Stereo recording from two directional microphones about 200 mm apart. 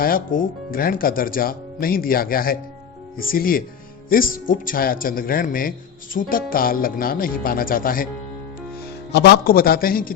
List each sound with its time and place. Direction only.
0.3 s speech: 45° left (ahead or behind)
9.1 s speech: 55° left (ahead or behind)